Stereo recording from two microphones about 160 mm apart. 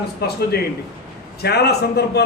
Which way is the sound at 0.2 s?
90° left.